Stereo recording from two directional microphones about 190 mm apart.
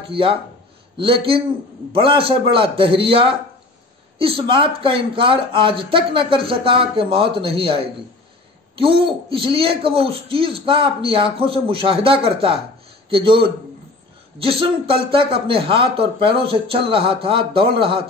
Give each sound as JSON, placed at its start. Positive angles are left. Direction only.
{"t": 0.1, "sound": "a man's voice", "side_deg": -30}